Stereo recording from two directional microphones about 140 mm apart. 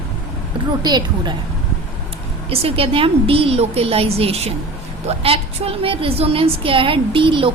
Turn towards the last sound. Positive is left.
turn(degrees=-35)  # may be behind; listen again after turning